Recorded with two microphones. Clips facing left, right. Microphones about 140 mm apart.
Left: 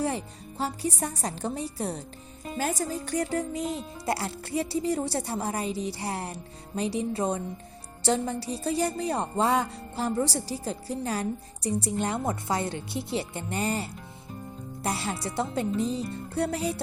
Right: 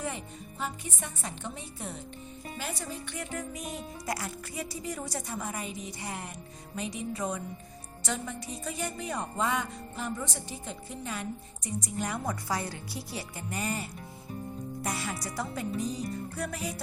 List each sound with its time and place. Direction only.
0.6 s a woman's voice: 35° left (ahead or behind)